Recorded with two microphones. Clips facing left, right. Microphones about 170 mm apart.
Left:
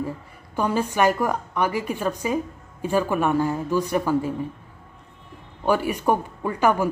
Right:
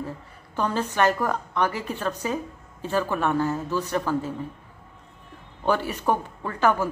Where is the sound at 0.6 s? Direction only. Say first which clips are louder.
Left 2 dB; 10° left (ahead or behind).